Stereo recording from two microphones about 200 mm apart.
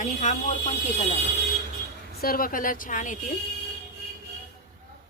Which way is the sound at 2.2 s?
45° left (ahead or behind).